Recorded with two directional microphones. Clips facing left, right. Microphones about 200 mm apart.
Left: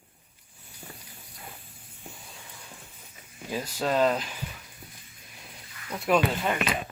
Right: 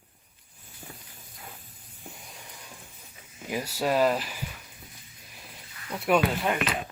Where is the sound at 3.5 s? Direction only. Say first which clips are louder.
Right 1 dB; 10° right (ahead or behind).